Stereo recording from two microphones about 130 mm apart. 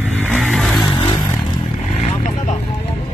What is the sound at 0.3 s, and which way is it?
Vehicle, 10° right (ahead or behind).